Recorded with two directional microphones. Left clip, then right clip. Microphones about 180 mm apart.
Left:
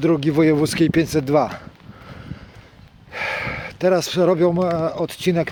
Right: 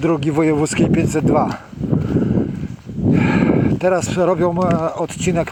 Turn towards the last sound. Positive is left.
turn(degrees=15)  # may be behind; listen again after turning